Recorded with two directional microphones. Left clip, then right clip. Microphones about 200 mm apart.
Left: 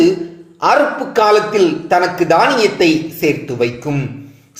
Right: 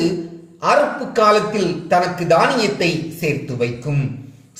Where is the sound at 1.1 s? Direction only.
20° left (ahead or behind).